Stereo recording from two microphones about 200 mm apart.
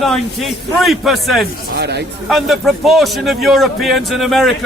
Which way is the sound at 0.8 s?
Centre (ahead or behind).